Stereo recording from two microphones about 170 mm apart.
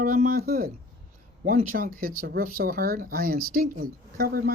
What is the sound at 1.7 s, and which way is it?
Speech, 55° right (ahead or behind).